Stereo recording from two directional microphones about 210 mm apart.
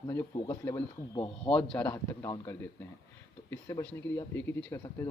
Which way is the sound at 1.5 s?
5° left (ahead or behind).